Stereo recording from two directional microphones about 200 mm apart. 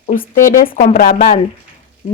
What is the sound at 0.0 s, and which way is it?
Speech, 40° left (ahead or behind).